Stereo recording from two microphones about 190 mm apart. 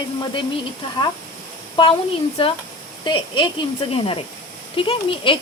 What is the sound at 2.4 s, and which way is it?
Speech, 30° left (ahead or behind).